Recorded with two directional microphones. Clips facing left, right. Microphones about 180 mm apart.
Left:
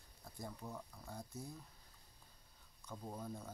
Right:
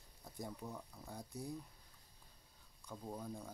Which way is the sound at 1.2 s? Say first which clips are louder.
Right 4 dB; 15° right (ahead or behind).